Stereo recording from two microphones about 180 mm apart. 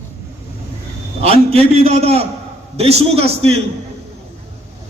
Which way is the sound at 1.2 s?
35° right (ahead or behind).